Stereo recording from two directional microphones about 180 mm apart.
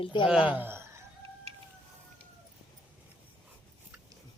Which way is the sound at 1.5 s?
35° right (ahead or behind).